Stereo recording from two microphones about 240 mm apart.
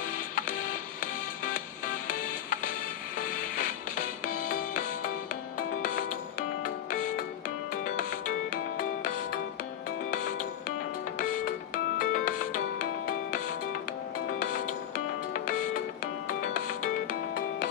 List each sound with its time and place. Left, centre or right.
2.0 s music: left
6.6 s music: left
10.1 s music: left
16.3 s music: left